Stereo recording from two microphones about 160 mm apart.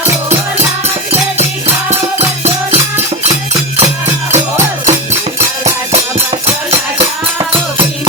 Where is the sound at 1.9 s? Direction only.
45° right (ahead or behind).